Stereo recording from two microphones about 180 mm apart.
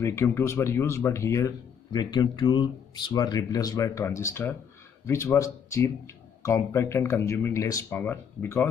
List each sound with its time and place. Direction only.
0.0 s speech: 15° left (ahead or behind)